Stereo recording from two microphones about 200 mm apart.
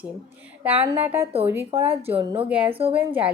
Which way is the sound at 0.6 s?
10° right (ahead or behind).